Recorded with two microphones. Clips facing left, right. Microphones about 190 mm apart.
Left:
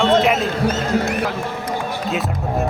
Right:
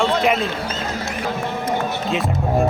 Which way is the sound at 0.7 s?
60° left (ahead or behind).